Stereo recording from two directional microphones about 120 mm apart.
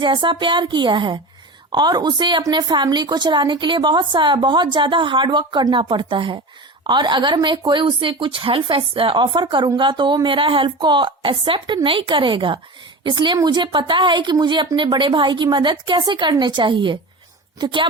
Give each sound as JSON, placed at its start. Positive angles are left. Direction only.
{"t": 0.0, "sound": "a woman's voice", "side_deg": -40}